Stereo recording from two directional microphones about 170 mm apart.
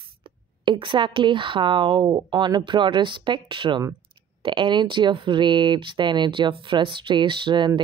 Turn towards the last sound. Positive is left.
turn(degrees=-30)  # may be behind; listen again after turning